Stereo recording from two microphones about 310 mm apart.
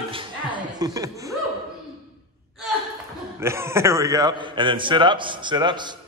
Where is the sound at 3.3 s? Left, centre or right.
Centre.